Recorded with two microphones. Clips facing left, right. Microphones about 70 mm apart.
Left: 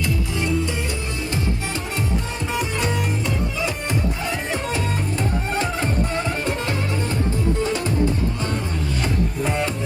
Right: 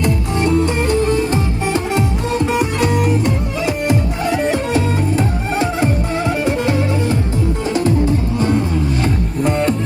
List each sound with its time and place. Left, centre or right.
0.0 s music: right
1.9 s music: right
5.5 s music: centre
7.6 s music: right
9.4 s music: centre